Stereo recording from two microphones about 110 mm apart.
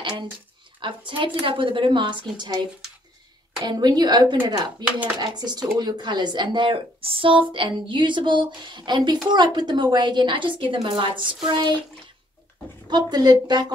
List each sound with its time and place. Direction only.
0.7 s a woman's voice: 50° right (ahead or behind)
3.6 s a woman's voice: 40° right (ahead or behind)
12.9 s a woman's voice: 40° right (ahead or behind)